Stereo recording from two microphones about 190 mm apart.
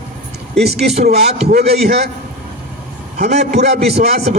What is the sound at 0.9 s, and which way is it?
Speech, 35° right (ahead or behind).